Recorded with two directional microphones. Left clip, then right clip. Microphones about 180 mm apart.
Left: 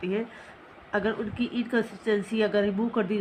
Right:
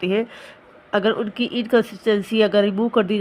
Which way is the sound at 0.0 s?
60° right (ahead or behind).